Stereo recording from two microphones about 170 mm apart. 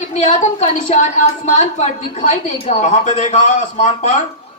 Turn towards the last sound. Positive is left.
turn(degrees=45)  # may be behind; listen again after turning